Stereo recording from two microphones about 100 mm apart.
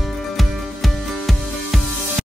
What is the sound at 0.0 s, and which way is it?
Music, centre (ahead or behind).